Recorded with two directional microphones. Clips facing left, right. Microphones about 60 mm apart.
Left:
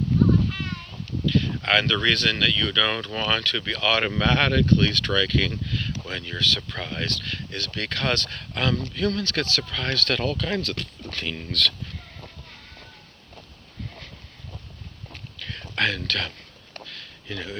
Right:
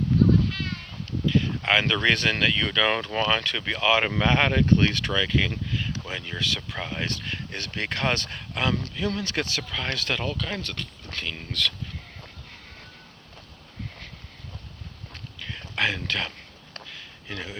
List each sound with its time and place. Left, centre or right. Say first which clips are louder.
1.3 s speech: left 1 dB; centre
10.2 s speech: left 4 dB; centre
15.4 s a sound: left 1 dB; centre